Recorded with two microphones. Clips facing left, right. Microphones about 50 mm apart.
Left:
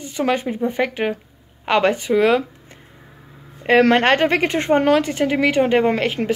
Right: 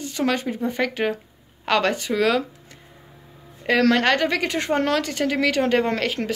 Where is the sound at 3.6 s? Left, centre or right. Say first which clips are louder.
Left 4 dB; left.